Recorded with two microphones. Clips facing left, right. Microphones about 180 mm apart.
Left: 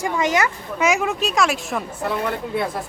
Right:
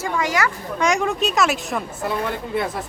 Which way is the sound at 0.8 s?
5° left (ahead or behind).